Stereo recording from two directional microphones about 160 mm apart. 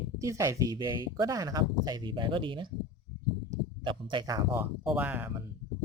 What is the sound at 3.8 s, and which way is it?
Speech, 30° right (ahead or behind).